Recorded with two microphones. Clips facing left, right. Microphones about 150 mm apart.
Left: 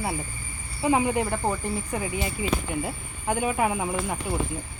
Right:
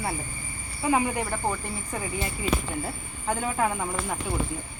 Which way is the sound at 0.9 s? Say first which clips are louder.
Left 2 dB; 20° left (ahead or behind).